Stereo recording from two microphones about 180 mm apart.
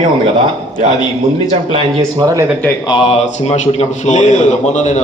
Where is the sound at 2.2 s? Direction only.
20° right (ahead or behind).